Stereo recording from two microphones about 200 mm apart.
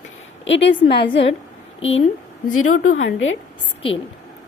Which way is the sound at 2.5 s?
90° left.